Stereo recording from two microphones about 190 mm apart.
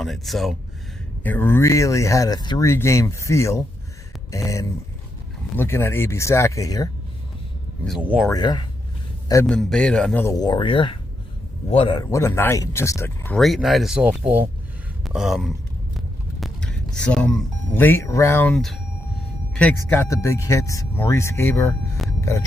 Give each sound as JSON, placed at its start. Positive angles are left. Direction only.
{"t": 0.0, "sound": "speech", "side_deg": 0}
{"t": 7.9, "sound": "speech", "side_deg": -5}
{"t": 8.3, "sound": "speech", "side_deg": 20}
{"t": 9.5, "sound": "speech", "side_deg": 0}
{"t": 10.2, "sound": "speech", "side_deg": 20}
{"t": 12.1, "sound": "speech", "side_deg": 15}
{"t": 13.3, "sound": "speech", "side_deg": 0}
{"t": 22.2, "sound": "a sound", "side_deg": 15}